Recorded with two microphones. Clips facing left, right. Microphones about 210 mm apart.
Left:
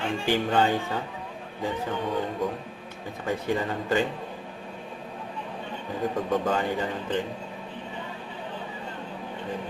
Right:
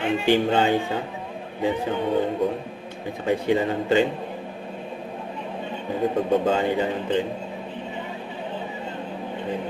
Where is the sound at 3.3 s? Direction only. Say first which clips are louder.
Right 6 dB; 25° right (ahead or behind).